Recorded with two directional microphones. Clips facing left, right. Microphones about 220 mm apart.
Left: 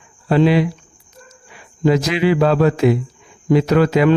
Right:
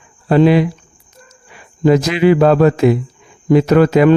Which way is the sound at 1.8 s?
50° right (ahead or behind).